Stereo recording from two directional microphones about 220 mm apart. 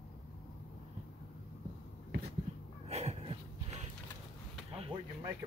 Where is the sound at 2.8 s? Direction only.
30° right (ahead or behind).